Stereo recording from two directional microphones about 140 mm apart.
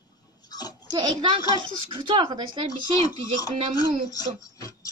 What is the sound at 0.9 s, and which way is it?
Speech, 30° right (ahead or behind).